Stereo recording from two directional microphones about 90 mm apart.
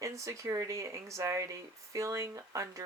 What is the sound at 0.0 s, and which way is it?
Speech, 35° right (ahead or behind).